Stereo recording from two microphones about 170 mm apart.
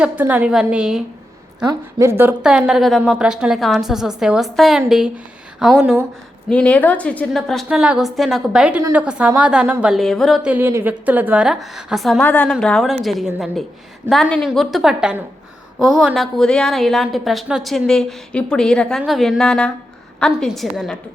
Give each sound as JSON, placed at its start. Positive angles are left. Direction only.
{"t": 0.0, "sound": "a woman's voice", "side_deg": -10}
{"t": 1.6, "sound": "a woman's voice", "side_deg": -15}